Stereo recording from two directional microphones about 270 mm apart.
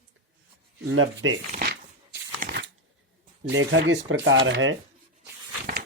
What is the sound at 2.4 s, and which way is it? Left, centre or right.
Shuffling cards, right.